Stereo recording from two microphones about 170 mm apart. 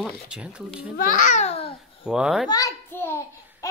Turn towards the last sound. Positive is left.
turn(degrees=10)  # may be behind; listen again after turning